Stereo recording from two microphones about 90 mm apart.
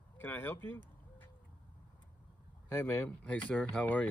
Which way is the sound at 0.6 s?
20° left (ahead or behind).